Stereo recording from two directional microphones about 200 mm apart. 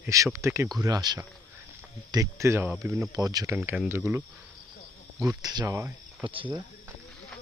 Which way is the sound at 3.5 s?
5° right (ahead or behind).